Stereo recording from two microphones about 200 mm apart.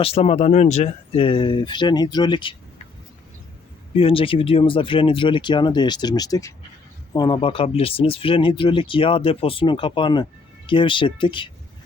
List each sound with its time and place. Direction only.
0.0 s speech: 30° left (ahead or behind)
3.9 s speech: 25° left (ahead or behind)